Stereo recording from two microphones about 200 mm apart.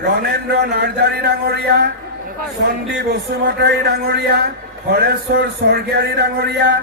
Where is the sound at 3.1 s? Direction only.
55° right (ahead or behind).